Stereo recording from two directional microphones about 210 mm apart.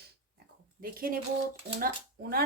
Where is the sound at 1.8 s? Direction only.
45° right (ahead or behind).